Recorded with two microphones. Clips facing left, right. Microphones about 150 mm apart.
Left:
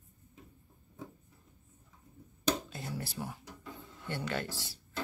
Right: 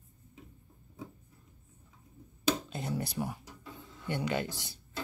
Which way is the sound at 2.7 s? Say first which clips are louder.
Right 5 dB; 20° right (ahead or behind).